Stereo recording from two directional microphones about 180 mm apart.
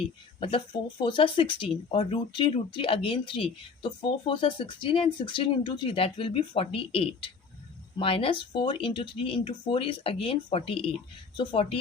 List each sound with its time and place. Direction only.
0.3 s speech: 30° left (ahead or behind)